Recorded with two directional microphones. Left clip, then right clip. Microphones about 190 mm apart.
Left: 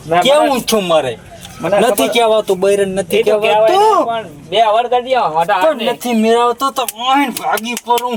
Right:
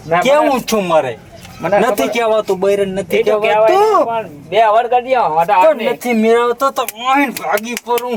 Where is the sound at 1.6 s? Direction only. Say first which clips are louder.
Even; 35° left (ahead or behind).